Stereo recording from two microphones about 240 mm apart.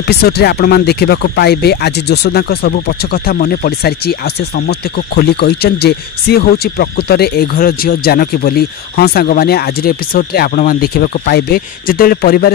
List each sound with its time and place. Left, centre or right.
0.0 s speech: left